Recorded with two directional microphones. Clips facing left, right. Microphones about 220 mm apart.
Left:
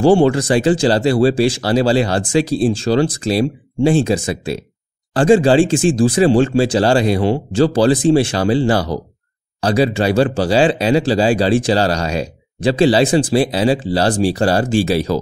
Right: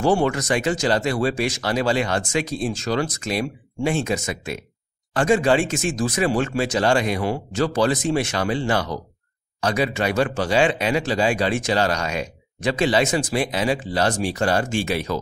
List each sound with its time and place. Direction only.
0.0 s speech: 30° left (ahead or behind)